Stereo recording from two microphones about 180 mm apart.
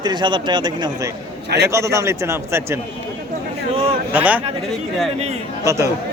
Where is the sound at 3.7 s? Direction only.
35° right (ahead or behind).